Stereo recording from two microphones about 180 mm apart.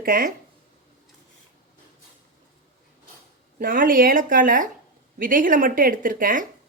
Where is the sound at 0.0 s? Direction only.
50° right (ahead or behind).